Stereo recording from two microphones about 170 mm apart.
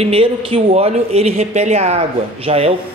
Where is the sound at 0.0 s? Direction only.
35° right (ahead or behind).